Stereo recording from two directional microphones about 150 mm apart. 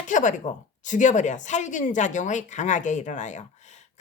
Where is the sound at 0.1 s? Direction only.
55° left (ahead or behind).